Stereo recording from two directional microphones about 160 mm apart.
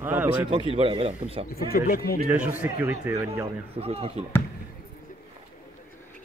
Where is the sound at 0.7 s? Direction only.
35° right (ahead or behind).